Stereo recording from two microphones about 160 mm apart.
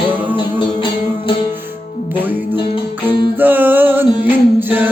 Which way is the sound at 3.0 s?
10° right (ahead or behind).